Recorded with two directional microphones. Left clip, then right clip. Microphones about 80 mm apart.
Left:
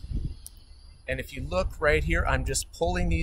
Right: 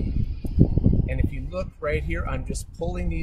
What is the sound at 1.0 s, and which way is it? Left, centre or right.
Speech, centre.